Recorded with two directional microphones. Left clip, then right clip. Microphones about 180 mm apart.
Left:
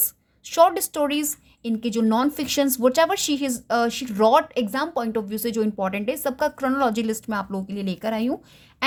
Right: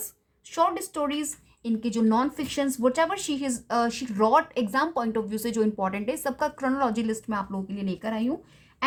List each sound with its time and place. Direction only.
0.4 s speech: 30° left (ahead or behind)
1.6 s speech: 20° left (ahead or behind)